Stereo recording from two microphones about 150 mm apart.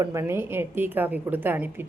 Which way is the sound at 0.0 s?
20° right (ahead or behind).